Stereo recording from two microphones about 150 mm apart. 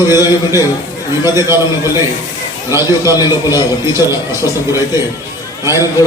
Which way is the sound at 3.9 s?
20° right (ahead or behind).